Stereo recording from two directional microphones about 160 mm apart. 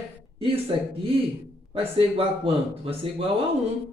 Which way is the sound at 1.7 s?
35° right (ahead or behind).